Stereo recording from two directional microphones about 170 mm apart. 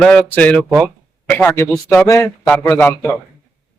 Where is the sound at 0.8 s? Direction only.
5° left (ahead or behind).